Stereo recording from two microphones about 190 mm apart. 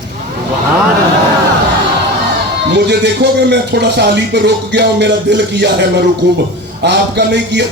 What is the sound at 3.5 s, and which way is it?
Speech, 60° right (ahead or behind).